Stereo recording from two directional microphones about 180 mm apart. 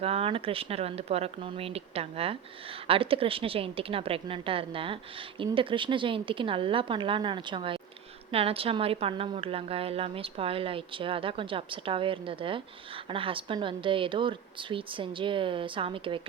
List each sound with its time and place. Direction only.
0.0 s a woman's voice: 30° right (ahead or behind)